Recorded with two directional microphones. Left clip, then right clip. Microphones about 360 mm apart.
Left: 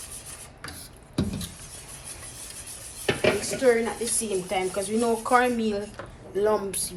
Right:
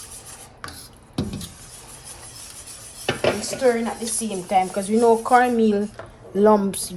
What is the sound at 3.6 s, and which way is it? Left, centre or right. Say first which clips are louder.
Speech: right 2 dB; right.